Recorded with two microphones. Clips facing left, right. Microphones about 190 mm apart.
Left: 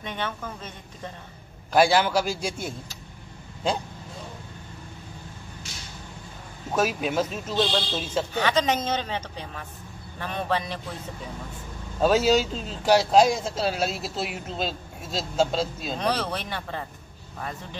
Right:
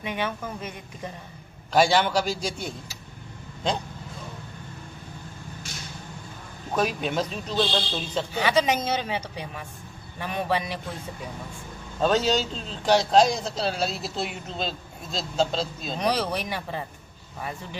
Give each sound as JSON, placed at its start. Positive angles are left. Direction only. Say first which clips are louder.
{"t": 0.0, "sound": "a man's voice", "louder": "right 2 dB", "side_deg": -10}
{"t": 1.7, "sound": "speech", "louder": "left 1 dB", "side_deg": 5}
{"t": 6.7, "sound": "speech", "louder": "left 1 dB", "side_deg": 5}
{"t": 8.3, "sound": "a man's voice", "louder": "right 2 dB", "side_deg": -10}
{"t": 12.0, "sound": "speech", "louder": "left 2 dB", "side_deg": 5}
{"t": 16.0, "sound": "a man's voice", "louder": "right 2 dB", "side_deg": -10}